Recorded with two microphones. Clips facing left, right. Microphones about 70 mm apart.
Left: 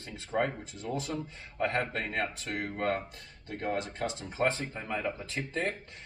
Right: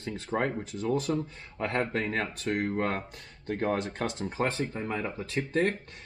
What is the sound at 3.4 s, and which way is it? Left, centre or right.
Speech, right.